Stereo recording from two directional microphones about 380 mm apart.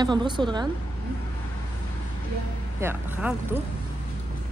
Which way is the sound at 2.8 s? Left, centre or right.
Centre.